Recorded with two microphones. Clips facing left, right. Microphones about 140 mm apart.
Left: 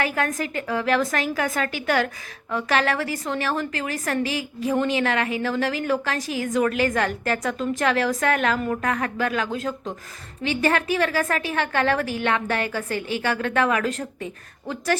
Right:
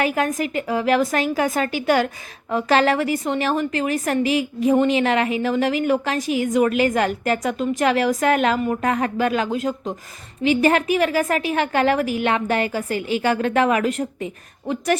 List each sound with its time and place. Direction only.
0.0 s a woman's voice: 20° right (ahead or behind)